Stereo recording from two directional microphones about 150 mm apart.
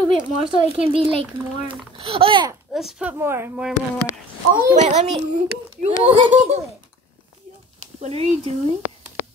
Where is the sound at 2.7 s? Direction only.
5° right (ahead or behind).